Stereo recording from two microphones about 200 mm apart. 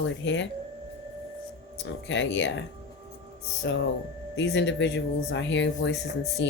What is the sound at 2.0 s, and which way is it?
Speech, 65° left (ahead or behind).